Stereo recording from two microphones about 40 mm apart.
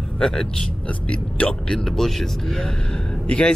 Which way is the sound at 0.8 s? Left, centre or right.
Left.